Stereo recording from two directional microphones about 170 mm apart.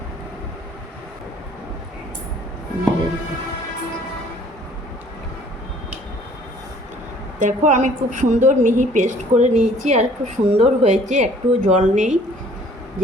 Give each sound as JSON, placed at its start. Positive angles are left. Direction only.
{"t": 7.3, "sound": "a woman's voice", "side_deg": -50}